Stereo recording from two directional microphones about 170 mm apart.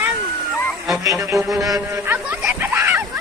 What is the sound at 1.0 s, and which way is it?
Music, 20° right (ahead or behind).